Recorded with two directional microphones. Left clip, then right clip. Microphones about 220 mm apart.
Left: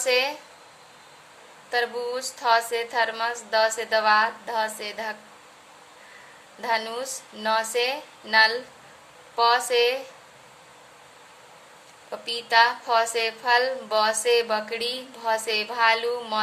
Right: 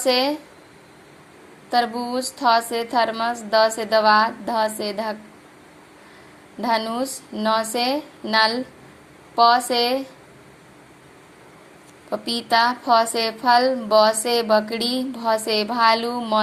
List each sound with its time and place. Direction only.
0.0 s a woman's voice: 15° right (ahead or behind)
1.7 s a woman's voice: 15° right (ahead or behind)
6.6 s a woman's voice: 15° right (ahead or behind)
12.1 s a woman's voice: 20° right (ahead or behind)